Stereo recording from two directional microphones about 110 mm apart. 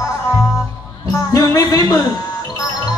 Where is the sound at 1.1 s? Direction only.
30° left (ahead or behind).